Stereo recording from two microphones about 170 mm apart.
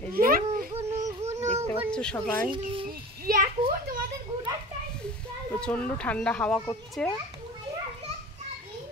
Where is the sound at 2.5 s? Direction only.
30° right (ahead or behind).